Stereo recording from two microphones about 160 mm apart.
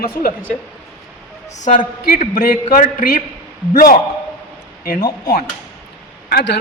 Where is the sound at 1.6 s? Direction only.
50° left (ahead or behind); by 3.9 s 65° left (ahead or behind).